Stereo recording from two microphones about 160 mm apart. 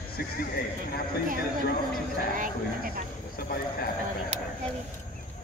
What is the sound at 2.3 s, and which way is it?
Speech, 60° right (ahead or behind).